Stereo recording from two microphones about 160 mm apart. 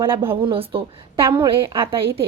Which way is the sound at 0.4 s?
35° right (ahead or behind).